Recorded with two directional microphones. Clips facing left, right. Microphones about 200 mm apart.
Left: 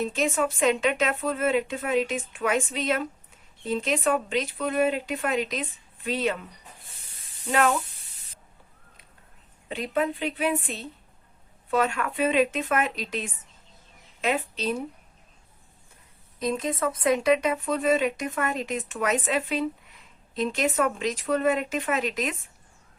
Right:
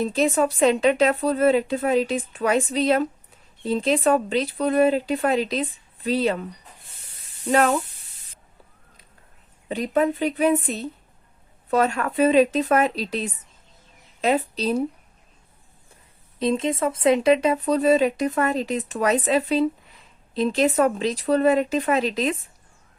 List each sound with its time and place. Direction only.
0.0 s speech: 35° right (ahead or behind)
9.6 s a woman's voice: 40° right (ahead or behind)
16.4 s speech: 25° right (ahead or behind)